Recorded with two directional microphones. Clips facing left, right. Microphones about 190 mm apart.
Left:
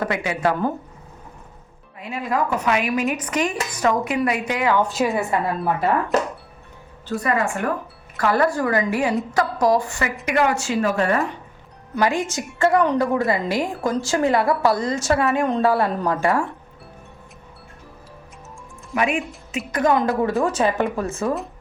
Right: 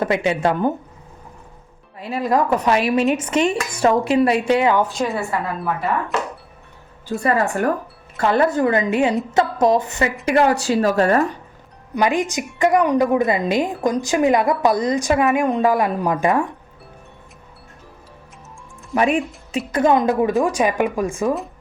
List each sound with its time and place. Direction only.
0.0 s a woman's voice: 25° right (ahead or behind)
2.0 s speech: 35° right (ahead or behind)
4.8 s a woman's voice: centre (ahead or behind)
5.0 s a woman's voice: 20° left (ahead or behind)
6.1 s speech: 40° left (ahead or behind)
7.2 s speech: 35° right (ahead or behind)
8.2 s a woman's voice: 25° right (ahead or behind)
10.2 s speech: 35° right (ahead or behind)
11.9 s a woman's voice: 15° right (ahead or behind)
18.9 s a woman's voice: 35° right (ahead or behind); by 21.2 s 15° right (ahead or behind)
21.2 s a woman's voice: centre (ahead or behind)